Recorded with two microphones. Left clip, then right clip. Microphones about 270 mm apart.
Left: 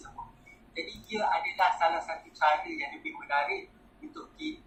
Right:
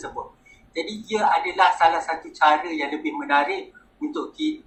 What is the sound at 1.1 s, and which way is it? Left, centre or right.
A man's voice, right.